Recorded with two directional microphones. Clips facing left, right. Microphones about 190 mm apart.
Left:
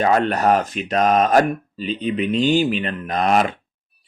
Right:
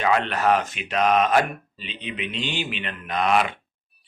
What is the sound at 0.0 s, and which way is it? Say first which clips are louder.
Speech: left 4 dB; 40° left (ahead or behind).